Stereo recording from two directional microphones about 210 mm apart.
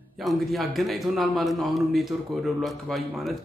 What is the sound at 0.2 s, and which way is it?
Speech, centre (ahead or behind).